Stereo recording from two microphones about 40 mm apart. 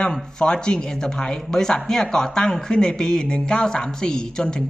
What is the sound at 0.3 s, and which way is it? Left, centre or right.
Speech, left.